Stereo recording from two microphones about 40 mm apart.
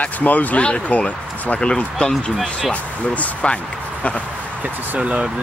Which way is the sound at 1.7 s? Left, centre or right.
Left.